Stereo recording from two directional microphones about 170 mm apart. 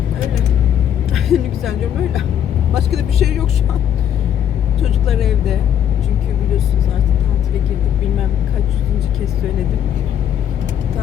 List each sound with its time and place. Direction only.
1.1 s music: centre (ahead or behind)
2.7 s speech: centre (ahead or behind)
4.8 s speech: centre (ahead or behind)